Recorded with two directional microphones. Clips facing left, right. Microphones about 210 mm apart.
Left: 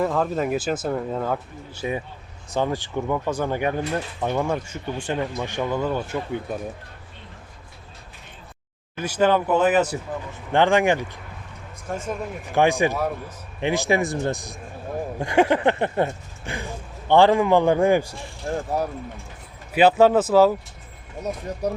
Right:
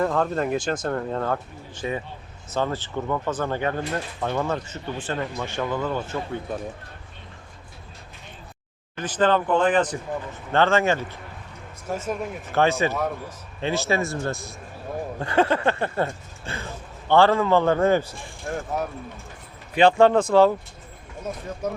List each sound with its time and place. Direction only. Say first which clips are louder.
0.0 s speech: even; 5° left (ahead or behind)
9.0 s speech: left 1 dB; 10° left (ahead or behind)
11.9 s speech: right 1 dB; 5° right (ahead or behind)
12.5 s speech: left 2 dB; 15° left (ahead or behind)
18.5 s speech: left 3 dB; 35° left (ahead or behind)
19.7 s speech: left 1 dB; 5° left (ahead or behind)
21.6 s speech: left 3 dB; 35° left (ahead or behind)